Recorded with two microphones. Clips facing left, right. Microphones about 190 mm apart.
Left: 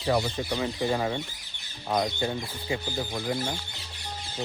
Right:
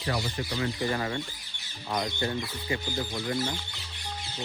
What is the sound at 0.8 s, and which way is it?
Speech, 20° left (ahead or behind).